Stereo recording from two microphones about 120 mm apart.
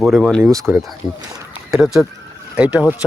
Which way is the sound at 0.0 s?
Centre (ahead or behind).